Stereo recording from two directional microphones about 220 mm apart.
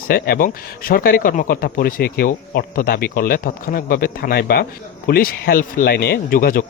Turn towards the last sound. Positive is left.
turn(degrees=40)  # may be behind; listen again after turning